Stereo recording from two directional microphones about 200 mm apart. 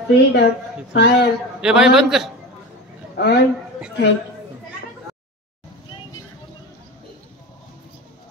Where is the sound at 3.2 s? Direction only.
50° left (ahead or behind).